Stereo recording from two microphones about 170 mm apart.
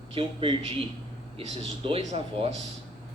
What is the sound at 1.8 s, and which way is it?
Speech, 35° right (ahead or behind).